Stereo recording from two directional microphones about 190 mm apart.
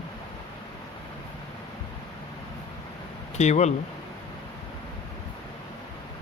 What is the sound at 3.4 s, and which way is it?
Speech, 35° left (ahead or behind).